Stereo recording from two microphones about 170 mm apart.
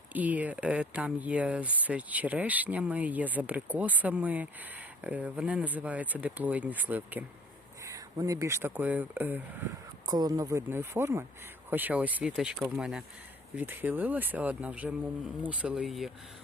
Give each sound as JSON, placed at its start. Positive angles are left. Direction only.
{"t": 0.1, "sound": "speech", "side_deg": -10}
{"t": 7.9, "sound": "speech", "side_deg": -20}
{"t": 10.1, "sound": "speech", "side_deg": -25}